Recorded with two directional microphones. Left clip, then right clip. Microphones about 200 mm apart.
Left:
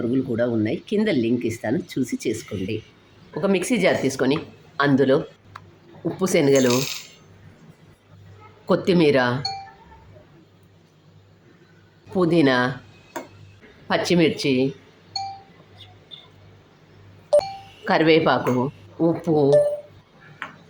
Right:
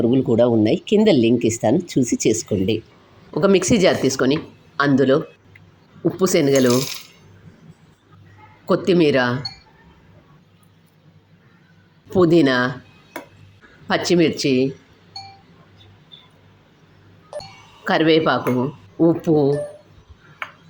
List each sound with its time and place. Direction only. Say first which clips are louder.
0.1 s speech: right 7 dB; 25° right (ahead or behind); by 6.8 s 5° right (ahead or behind)
8.6 s speech: right 2 dB; centre (ahead or behind)
12.1 s speech: right 3 dB; 10° right (ahead or behind)
13.8 s speech: right 2 dB; 5° right (ahead or behind)
17.8 s speech: right 1 dB; centre (ahead or behind)
18.9 s speech: right 3 dB; 10° right (ahead or behind)